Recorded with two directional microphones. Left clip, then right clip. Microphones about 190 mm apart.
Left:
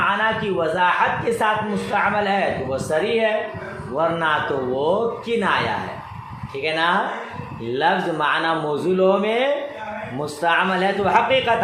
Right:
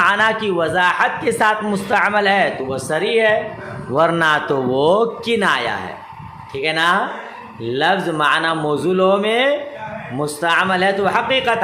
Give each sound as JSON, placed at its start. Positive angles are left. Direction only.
{"t": 0.2, "sound": "a man's voice", "side_deg": -45}
{"t": 3.9, "sound": "a man's voice", "side_deg": -55}
{"t": 6.6, "sound": "speech", "side_deg": -30}